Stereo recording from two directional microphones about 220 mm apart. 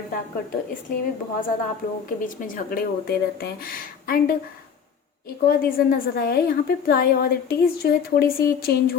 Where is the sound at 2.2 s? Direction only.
40° left (ahead or behind).